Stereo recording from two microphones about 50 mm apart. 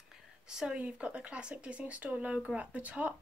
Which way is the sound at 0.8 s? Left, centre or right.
Right.